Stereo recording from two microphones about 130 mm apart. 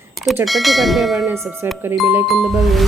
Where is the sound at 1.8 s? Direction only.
15° right (ahead or behind).